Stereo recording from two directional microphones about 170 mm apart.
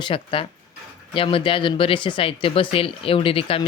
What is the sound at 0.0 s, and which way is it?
Speech, 30° left (ahead or behind).